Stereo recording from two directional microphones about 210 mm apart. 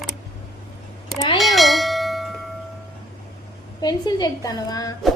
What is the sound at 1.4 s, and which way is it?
Bell, centre (ahead or behind).